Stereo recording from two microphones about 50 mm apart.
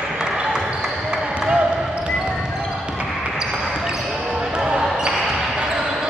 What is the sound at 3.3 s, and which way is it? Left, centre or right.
Basketball bounce, centre.